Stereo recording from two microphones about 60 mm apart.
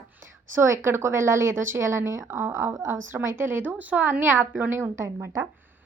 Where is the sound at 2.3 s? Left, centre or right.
Right.